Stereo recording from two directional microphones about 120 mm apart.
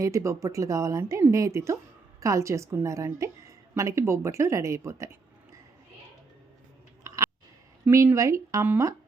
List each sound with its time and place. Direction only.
0.0 s speech: 25° right (ahead or behind)
7.1 s a sound: 25° right (ahead or behind)
7.9 s speech: 25° right (ahead or behind)